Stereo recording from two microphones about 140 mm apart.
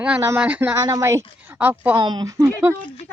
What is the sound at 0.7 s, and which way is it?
A woman's voice, 25° right (ahead or behind).